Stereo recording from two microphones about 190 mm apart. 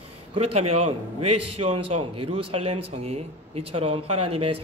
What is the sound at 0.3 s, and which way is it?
Speech, 30° right (ahead or behind).